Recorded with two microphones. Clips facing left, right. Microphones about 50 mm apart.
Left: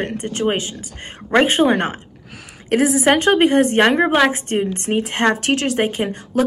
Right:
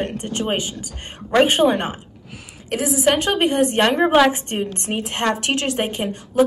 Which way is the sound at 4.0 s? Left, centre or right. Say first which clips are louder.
Even; centre.